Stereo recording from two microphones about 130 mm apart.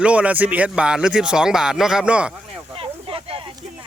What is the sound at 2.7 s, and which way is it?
Snake, 45° right (ahead or behind).